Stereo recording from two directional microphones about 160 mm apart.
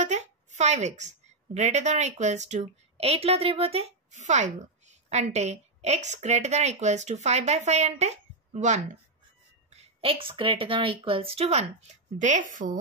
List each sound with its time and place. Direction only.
0.0 s a woman's voice: 45° right (ahead or behind)